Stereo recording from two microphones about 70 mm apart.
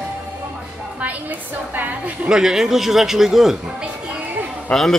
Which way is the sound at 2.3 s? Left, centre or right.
Centre.